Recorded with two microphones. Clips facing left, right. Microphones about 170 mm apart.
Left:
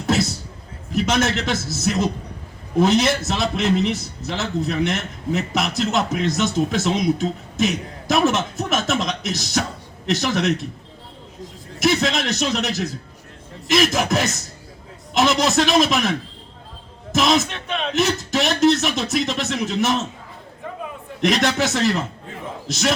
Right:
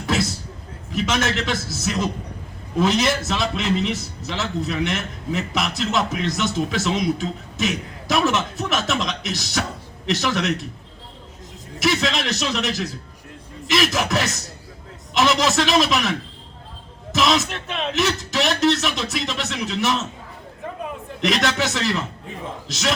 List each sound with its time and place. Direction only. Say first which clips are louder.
1.1 s a man's voice: left 1 dB; 45° left (ahead or behind)
11.8 s a man's voice: left 2 dB; 45° left (ahead or behind)
17.5 s a man's voice: left 1 dB; centre (ahead or behind)
17.9 s a man's voice: left 2 dB; 50° left (ahead or behind)
21.2 s a man's voice: left 2 dB; 45° left (ahead or behind)